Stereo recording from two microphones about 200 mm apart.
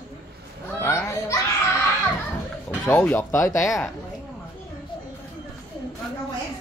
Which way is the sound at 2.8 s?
5° left (ahead or behind).